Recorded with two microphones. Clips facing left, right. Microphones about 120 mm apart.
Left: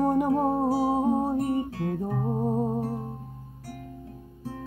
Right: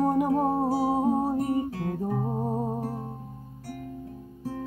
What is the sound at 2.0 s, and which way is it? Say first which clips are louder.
Music: even; 20° right (ahead or behind).